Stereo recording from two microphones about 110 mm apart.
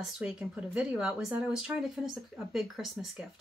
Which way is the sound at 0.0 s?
10° right (ahead or behind).